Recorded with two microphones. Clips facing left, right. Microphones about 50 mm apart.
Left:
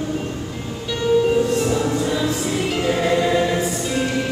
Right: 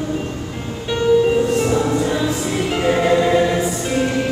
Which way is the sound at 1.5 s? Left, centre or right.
Right.